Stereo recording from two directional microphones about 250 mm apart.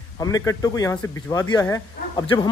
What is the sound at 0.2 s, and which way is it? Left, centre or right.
Speech, centre.